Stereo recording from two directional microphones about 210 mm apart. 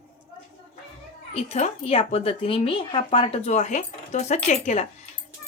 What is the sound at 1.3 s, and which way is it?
Speech, 30° left (ahead or behind).